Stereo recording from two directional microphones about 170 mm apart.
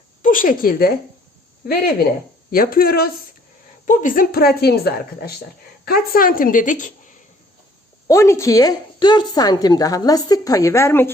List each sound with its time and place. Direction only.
0.2 s a woman's voice: 55° left (ahead or behind)
3.8 s a woman's voice: 50° left (ahead or behind)
8.0 s a woman's voice: 15° left (ahead or behind)